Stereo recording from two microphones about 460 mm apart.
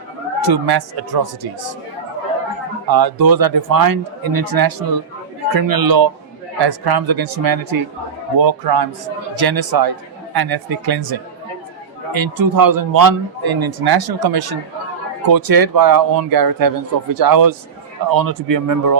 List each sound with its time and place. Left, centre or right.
0.4 s a man's voice: right
2.8 s a man's voice: right